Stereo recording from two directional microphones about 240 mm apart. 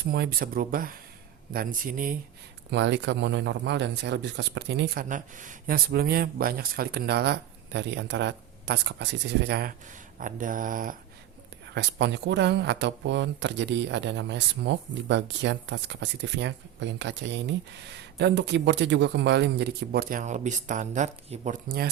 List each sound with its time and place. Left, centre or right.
0.0 s speech: right
2.6 s speech: right
11.7 s speech: right